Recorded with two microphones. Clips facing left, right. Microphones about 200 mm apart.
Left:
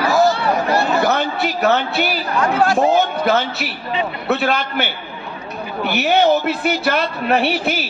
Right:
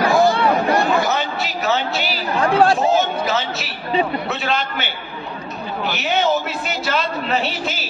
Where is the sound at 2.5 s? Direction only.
30° right (ahead or behind).